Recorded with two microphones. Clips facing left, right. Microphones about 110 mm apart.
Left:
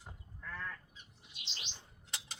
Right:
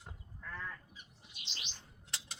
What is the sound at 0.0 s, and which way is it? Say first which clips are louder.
Goat: even; centre (ahead or behind).